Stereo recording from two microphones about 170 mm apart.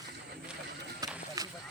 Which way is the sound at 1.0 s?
25° right (ahead or behind).